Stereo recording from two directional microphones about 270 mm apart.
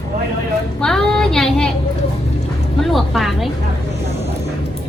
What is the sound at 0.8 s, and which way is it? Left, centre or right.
Speech, centre.